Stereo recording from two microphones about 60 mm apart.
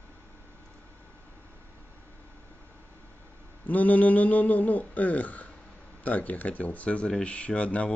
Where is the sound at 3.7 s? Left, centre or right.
Left.